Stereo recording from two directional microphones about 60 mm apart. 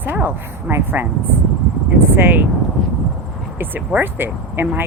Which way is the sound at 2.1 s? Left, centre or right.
Right.